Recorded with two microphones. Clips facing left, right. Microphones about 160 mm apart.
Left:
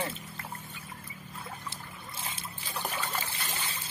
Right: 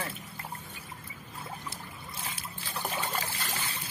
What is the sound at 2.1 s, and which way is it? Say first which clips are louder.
Trickle: even; 25° left (ahead or behind).